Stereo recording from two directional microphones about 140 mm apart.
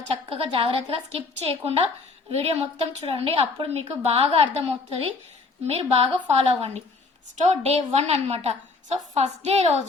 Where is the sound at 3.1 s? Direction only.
40° right (ahead or behind).